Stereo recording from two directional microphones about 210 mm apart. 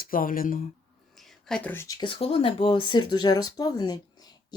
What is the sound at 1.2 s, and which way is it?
Speech, centre (ahead or behind).